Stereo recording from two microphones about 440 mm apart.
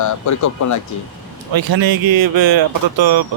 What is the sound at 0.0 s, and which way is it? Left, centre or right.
Speech, left.